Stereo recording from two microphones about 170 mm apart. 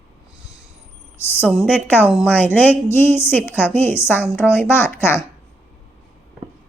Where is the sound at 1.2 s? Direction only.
15° left (ahead or behind).